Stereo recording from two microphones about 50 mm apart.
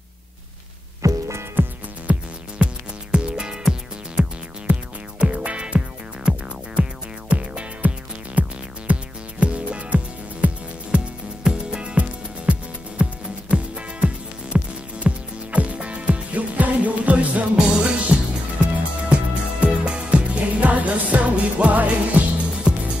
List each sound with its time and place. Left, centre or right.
1.0 s music: right
1.6 s music: right
2.1 s music: right
2.6 s music: centre
4.7 s music: right